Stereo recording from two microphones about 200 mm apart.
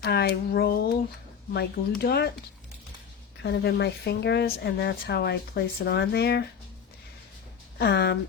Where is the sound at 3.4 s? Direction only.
55° left (ahead or behind).